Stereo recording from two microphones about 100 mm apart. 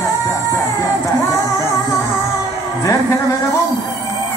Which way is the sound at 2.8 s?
35° left (ahead or behind).